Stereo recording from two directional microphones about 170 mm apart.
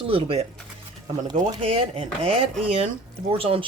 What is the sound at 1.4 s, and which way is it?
Speech, 35° right (ahead or behind).